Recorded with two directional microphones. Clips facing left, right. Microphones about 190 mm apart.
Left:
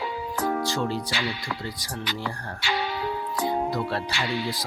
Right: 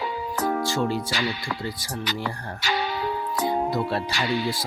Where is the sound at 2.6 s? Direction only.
40° right (ahead or behind).